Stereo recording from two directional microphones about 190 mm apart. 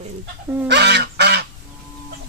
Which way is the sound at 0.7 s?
65° right (ahead or behind).